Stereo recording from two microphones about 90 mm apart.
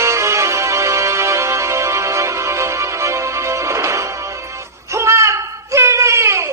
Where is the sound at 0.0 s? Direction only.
35° right (ahead or behind).